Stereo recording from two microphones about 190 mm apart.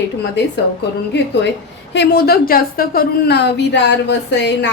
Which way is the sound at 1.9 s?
60° left (ahead or behind).